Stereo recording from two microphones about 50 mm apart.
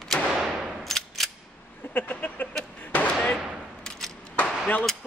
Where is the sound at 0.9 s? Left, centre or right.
Centre.